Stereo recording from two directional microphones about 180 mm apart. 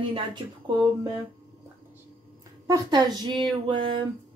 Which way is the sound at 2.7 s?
20° right (ahead or behind).